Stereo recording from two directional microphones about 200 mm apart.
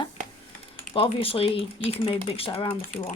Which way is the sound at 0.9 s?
25° left (ahead or behind).